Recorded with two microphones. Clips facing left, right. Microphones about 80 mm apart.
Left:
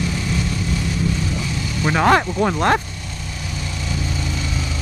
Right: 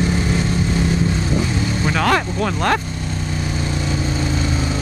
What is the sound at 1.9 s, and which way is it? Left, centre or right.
Speech, left.